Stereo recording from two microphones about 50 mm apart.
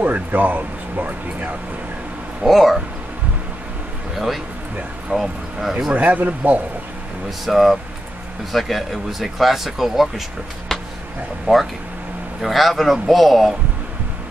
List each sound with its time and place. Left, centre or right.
0.0 s speech: right
2.4 s speech: centre
5.1 s speech: centre
5.9 s speech: right
7.2 s speech: centre
10.7 s a sound: centre
11.5 s speech: right
12.4 s speech: centre